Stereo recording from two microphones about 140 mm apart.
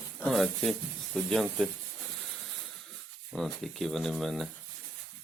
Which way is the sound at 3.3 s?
Centre (ahead or behind).